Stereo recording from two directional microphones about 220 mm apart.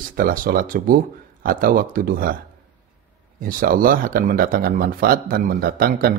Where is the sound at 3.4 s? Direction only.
40° right (ahead or behind).